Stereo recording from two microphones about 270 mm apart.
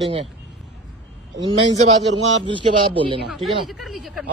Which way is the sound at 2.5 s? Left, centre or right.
Centre.